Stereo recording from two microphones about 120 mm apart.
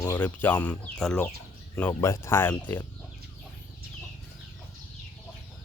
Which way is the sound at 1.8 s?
20° left (ahead or behind).